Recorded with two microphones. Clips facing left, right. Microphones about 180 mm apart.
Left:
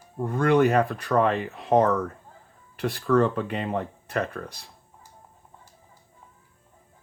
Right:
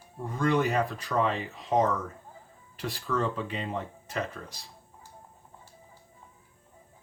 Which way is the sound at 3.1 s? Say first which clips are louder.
Left 8 dB; 60° left (ahead or behind).